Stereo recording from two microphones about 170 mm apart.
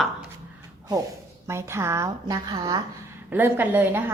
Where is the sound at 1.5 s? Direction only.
15° right (ahead or behind).